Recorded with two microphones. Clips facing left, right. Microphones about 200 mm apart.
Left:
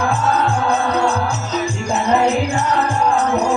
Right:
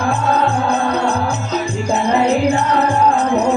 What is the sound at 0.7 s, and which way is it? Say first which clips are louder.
Music: even; 60° right (ahead or behind).